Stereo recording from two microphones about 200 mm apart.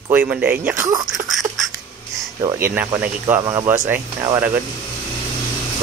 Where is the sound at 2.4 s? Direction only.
15° right (ahead or behind).